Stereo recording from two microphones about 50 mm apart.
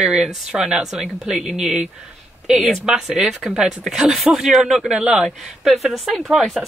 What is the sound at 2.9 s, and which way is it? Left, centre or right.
Speech, centre.